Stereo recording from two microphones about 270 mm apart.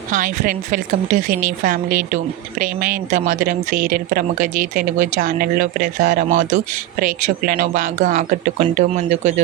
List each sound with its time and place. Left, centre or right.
0.1 s speech: right